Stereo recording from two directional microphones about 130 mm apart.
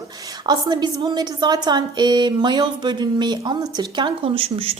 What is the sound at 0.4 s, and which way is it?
A woman's voice, 30° right (ahead or behind).